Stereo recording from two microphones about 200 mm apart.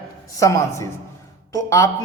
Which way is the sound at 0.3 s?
15° left (ahead or behind).